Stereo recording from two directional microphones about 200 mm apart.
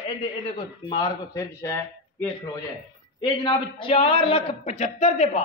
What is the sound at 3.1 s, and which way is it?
A man's voice, 20° left (ahead or behind).